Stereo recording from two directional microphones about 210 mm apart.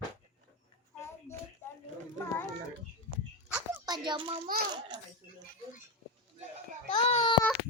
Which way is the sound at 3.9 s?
20° right (ahead or behind).